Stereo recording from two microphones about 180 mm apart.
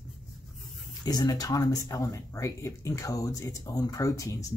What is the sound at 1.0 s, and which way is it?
Speech, 20° left (ahead or behind).